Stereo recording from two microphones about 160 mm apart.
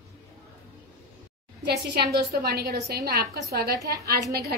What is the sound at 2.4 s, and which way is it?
A woman's voice, 80° right.